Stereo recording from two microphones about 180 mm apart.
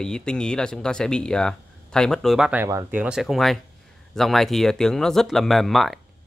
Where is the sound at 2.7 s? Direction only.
20° right (ahead or behind).